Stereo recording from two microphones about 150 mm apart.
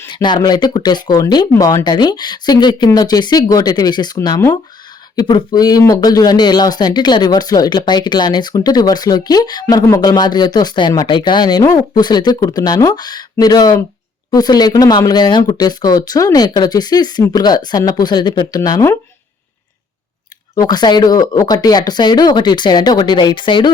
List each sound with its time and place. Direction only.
0.1 s speech: 30° left (ahead or behind)
20.6 s speech: 25° left (ahead or behind)